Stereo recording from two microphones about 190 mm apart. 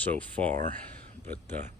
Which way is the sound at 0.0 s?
10° left (ahead or behind).